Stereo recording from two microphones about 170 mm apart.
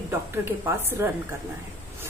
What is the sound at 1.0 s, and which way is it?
Speech, 15° right (ahead or behind).